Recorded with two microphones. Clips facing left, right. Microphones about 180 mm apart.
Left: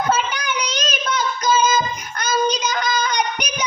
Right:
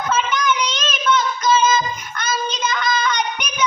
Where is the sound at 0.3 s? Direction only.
40° left (ahead or behind).